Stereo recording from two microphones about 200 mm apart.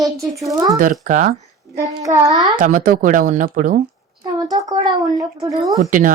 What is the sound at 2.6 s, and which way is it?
Speech, 45° right (ahead or behind).